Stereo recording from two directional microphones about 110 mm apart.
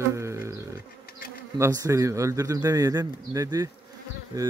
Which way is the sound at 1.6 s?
30° right (ahead or behind).